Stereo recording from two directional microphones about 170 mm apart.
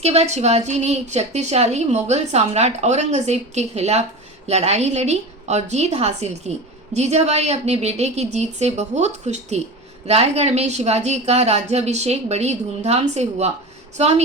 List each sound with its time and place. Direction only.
0.0 s a woman's voice: 40° right (ahead or behind)